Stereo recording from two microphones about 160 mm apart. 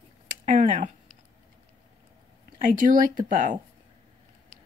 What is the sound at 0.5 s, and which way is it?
Speech, 55° right (ahead or behind).